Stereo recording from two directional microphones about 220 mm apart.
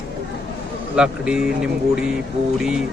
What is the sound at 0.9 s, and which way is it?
Speech, 5° right (ahead or behind).